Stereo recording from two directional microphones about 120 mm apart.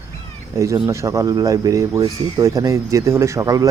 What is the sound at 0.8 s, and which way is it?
Speech, 25° right (ahead or behind).